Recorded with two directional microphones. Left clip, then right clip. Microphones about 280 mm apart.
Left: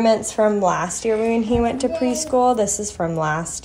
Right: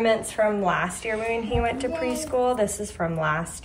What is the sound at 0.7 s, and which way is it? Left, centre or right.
Speech, left.